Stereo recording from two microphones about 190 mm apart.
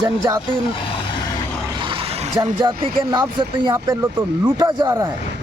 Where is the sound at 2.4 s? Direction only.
20° right (ahead or behind).